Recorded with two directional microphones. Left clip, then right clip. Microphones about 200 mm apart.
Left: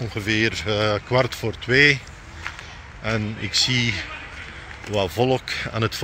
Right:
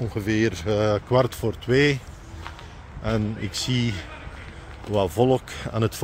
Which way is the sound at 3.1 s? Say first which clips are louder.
Left 10 dB; 15° right (ahead or behind).